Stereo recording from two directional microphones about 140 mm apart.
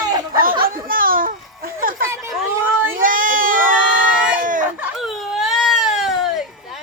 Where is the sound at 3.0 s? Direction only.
75° right (ahead or behind).